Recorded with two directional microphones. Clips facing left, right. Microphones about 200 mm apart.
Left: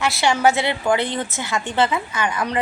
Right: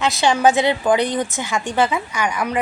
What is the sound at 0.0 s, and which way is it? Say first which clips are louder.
A woman's voice: right 2 dB; 20° right (ahead or behind).